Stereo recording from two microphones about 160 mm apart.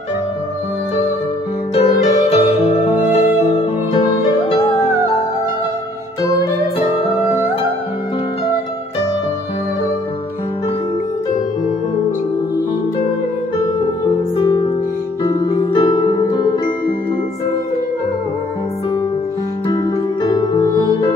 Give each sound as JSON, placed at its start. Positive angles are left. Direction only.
{"t": 1.8, "sound": "music", "side_deg": 40}
{"t": 4.0, "sound": "music", "side_deg": 30}
{"t": 14.3, "sound": "music", "side_deg": 30}
{"t": 19.7, "sound": "music", "side_deg": 30}